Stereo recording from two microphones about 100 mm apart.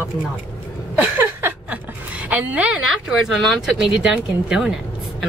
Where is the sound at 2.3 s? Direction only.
15° right (ahead or behind).